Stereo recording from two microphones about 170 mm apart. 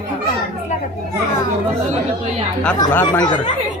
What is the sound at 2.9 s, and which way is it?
Speech, 15° left (ahead or behind).